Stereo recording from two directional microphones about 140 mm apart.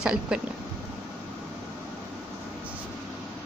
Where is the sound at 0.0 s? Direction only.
5° right (ahead or behind).